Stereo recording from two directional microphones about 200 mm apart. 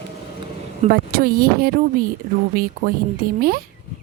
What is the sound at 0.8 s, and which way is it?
A woman's voice, 45° right (ahead or behind).